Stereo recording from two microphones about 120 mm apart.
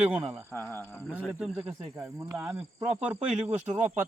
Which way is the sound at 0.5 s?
15° left (ahead or behind).